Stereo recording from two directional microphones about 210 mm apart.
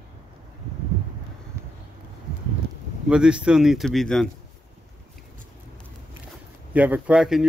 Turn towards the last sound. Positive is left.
turn(degrees=0)  # may be behind; listen again after turning